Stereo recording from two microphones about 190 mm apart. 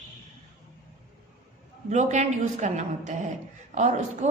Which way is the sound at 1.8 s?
40° right (ahead or behind).